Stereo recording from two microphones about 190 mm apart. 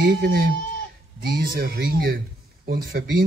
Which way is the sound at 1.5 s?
55° right (ahead or behind).